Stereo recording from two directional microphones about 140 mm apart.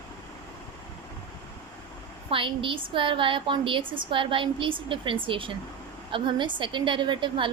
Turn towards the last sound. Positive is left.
turn(degrees=-35)  # may be behind; listen again after turning